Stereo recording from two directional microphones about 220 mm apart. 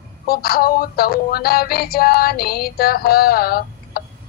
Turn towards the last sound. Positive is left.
turn(degrees=45)  # may be behind; listen again after turning